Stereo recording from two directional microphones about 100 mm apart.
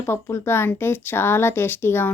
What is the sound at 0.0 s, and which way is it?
A woman's voice, 30° left (ahead or behind).